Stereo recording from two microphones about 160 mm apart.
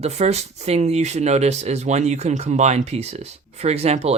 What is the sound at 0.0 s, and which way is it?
Speech, 40° right (ahead or behind).